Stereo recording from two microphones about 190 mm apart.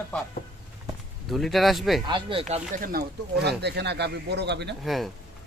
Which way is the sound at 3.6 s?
60° right (ahead or behind).